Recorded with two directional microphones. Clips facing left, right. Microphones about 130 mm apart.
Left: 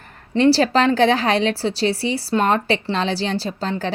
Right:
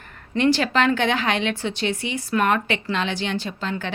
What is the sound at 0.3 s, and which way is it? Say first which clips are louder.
Speech: left 4 dB; 35° left (ahead or behind).